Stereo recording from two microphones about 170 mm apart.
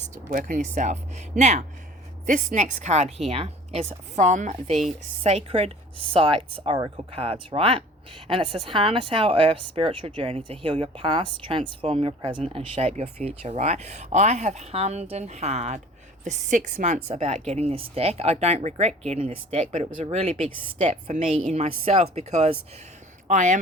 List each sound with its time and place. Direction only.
0.1 s a woman's voice: 55° right (ahead or behind)
4.7 s a woman's voice: centre (ahead or behind)
5.2 s a woman's voice: 35° right (ahead or behind)